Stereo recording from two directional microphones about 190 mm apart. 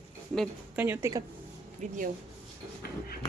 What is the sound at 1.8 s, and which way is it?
Speech, 40° right (ahead or behind).